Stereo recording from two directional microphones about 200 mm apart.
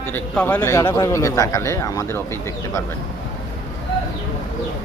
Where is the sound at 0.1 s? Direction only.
10° left (ahead or behind).